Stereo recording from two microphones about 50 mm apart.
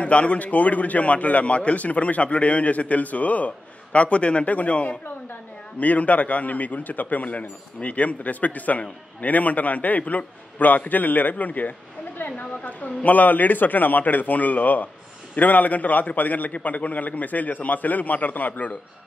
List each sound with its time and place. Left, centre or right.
0.0 s a man's voice: left